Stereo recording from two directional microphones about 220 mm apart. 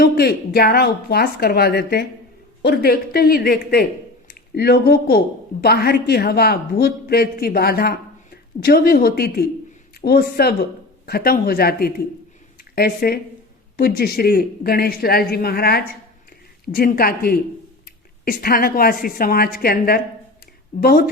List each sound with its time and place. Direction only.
0.0 s a woman's voice: 45° left (ahead or behind)